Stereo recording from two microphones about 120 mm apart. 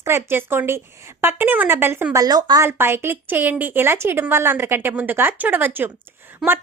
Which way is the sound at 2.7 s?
20° right (ahead or behind).